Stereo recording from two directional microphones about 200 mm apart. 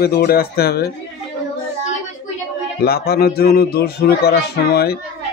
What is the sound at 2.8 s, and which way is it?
Speech, 50° left (ahead or behind).